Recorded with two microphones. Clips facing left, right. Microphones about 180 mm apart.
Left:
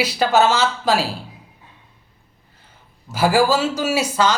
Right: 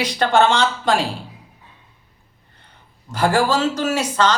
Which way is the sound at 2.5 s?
5° left (ahead or behind).